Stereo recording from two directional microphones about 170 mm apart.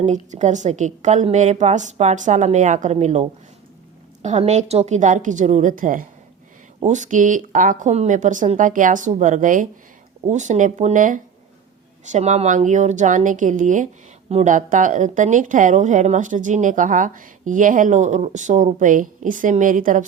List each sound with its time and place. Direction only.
0.0 s speech: 45° right (ahead or behind)